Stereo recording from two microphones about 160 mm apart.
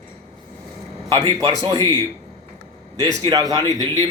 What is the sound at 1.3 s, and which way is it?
Speech, 25° right (ahead or behind).